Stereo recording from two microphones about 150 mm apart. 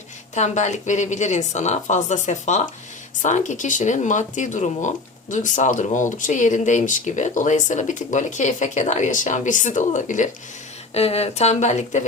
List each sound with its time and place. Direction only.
0.3 s a woman's voice: 50° left (ahead or behind)
10.9 s a woman's voice: 45° left (ahead or behind)